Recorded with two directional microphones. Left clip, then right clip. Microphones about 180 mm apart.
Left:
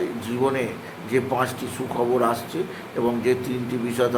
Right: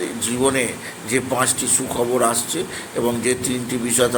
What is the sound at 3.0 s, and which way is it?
A man's voice, 20° right (ahead or behind).